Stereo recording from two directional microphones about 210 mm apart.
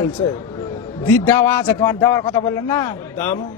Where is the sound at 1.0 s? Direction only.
10° left (ahead or behind).